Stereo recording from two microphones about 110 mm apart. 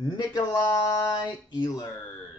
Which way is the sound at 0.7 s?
25° left (ahead or behind).